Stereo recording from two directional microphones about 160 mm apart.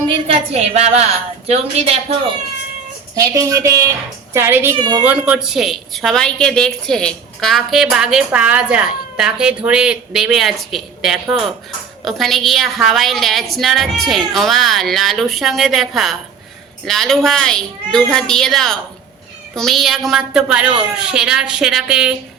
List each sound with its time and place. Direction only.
0.3 s a woman's voice: 40° right (ahead or behind)
3.2 s a woman's voice: 20° right (ahead or behind)
4.8 s a woman's voice: 25° right (ahead or behind)
5.0 s a woman's voice: 10° right (ahead or behind)